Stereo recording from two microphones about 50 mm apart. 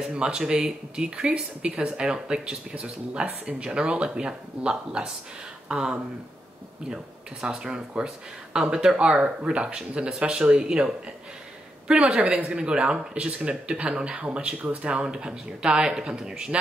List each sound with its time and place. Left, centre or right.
0.1 s speech: right
7.4 s speech: centre
11.9 s speech: centre